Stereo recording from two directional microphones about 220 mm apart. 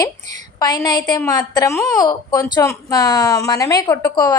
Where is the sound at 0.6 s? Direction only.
15° left (ahead or behind).